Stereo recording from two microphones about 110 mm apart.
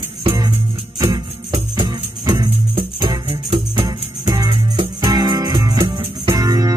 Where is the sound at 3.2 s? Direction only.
60° right (ahead or behind).